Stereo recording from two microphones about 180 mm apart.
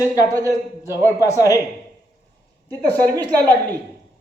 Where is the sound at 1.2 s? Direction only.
15° left (ahead or behind).